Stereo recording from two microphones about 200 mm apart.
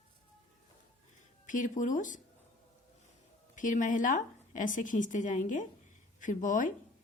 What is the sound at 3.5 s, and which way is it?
A woman's voice, 40° left (ahead or behind).